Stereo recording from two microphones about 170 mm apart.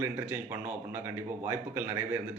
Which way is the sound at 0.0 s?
10° right (ahead or behind).